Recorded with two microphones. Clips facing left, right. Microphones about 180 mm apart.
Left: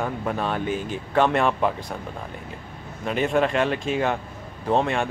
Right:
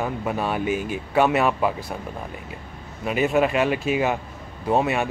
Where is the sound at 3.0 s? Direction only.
5° right (ahead or behind).